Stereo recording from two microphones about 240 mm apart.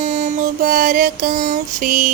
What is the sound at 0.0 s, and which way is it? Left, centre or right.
Mantra, right.